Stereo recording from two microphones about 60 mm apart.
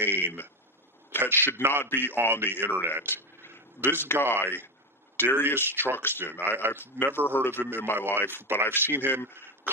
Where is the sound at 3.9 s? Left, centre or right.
Left.